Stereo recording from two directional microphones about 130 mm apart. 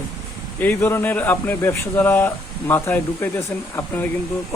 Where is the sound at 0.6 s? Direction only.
15° left (ahead or behind).